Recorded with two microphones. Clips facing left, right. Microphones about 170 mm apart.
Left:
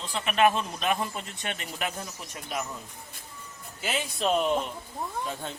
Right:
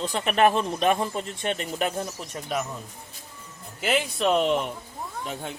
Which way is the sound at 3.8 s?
60° right (ahead or behind).